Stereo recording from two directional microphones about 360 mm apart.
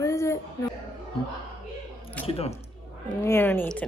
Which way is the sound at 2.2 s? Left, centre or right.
Centre.